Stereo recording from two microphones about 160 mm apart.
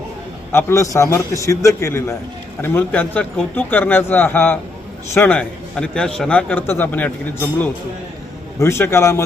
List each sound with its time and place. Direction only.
0.5 s a man's voice: 20° left (ahead or behind)
8.5 s a man's voice: 15° left (ahead or behind)